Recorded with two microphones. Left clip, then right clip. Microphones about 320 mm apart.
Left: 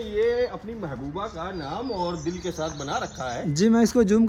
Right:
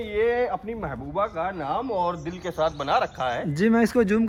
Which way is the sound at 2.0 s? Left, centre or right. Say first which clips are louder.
Right 1 dB; centre.